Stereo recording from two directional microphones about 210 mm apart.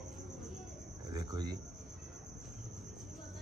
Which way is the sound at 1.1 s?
20° right (ahead or behind).